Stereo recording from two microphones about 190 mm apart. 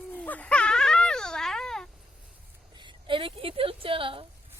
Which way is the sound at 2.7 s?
25° right (ahead or behind).